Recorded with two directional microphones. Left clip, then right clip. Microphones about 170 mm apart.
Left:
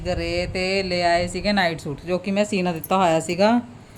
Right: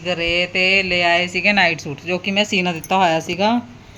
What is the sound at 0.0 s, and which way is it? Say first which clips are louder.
Speech: right 6 dB; centre (ahead or behind).